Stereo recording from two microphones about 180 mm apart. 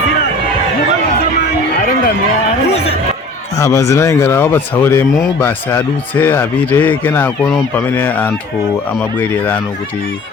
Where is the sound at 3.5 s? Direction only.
20° left (ahead or behind).